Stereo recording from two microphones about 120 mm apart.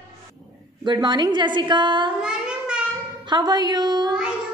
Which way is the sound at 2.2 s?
5° right (ahead or behind).